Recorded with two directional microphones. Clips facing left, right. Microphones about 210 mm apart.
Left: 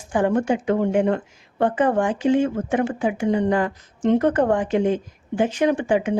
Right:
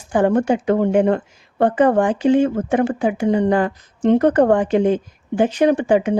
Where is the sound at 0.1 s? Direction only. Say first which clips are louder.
Right 4 dB; 35° right (ahead or behind).